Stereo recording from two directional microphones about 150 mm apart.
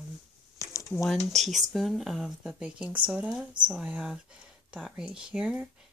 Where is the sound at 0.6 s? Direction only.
20° left (ahead or behind).